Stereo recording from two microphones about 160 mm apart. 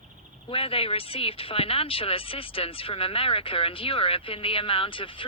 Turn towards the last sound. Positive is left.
turn(degrees=30)  # may be behind; listen again after turning